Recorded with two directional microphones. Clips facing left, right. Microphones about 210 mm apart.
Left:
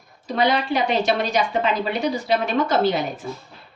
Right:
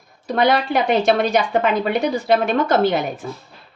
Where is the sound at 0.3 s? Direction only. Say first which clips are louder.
Right 3 dB; 55° right (ahead or behind).